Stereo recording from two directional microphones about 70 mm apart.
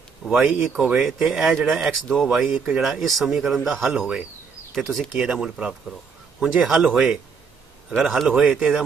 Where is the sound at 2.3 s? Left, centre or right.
Centre.